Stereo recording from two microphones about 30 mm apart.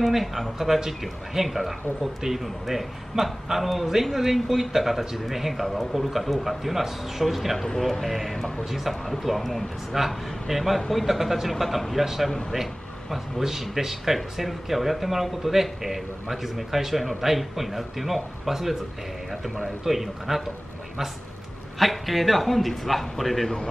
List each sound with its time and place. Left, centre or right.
0.1 s speech: centre
12.3 s speech: left
13.4 s speech: centre
19.8 s speech: centre
21.7 s speech: centre